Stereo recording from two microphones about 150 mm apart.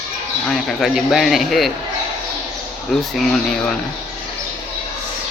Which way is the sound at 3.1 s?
5° left (ahead or behind).